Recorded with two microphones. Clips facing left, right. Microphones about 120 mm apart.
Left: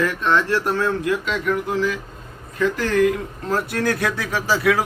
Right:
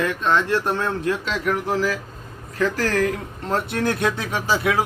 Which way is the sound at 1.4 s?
40° right (ahead or behind).